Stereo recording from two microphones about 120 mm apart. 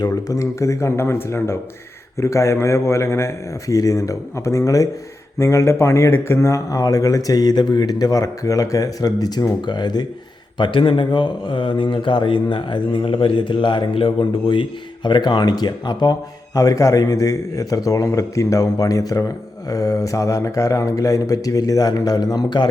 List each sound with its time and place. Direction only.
0.0 s a man's voice: 25° left (ahead or behind)
10.6 s a man's voice: 45° left (ahead or behind)